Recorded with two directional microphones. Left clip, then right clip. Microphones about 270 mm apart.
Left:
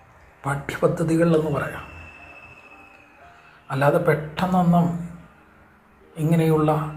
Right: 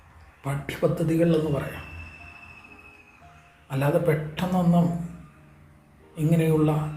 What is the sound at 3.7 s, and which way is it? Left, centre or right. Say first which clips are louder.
Speech: left 5 dB; centre.